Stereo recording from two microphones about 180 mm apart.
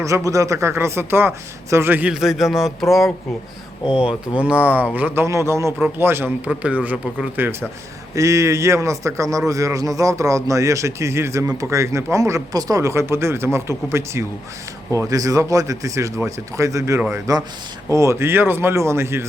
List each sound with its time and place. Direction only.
0.0 s a man's voice: 15° right (ahead or behind); by 2.7 s centre (ahead or behind)
3.8 s a man's voice: 5° right (ahead or behind)